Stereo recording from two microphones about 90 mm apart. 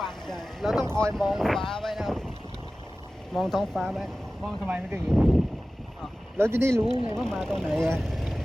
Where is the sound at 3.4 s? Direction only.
5° left (ahead or behind).